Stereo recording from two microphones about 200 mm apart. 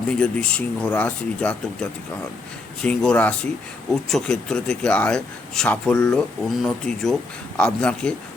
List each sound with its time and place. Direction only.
0.1 s speech: 5° left (ahead or behind)